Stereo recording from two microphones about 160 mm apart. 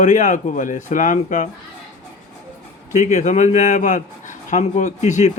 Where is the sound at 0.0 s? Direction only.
50° left (ahead or behind).